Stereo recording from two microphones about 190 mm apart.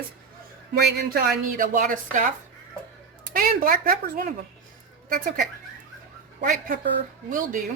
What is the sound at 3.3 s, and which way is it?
A woman's voice, 50° right (ahead or behind).